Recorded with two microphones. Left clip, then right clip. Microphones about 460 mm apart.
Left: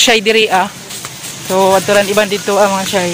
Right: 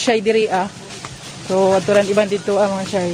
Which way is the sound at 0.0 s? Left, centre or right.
Right.